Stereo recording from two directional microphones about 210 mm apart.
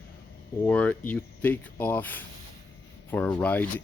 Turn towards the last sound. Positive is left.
turn(degrees=10)  # may be behind; listen again after turning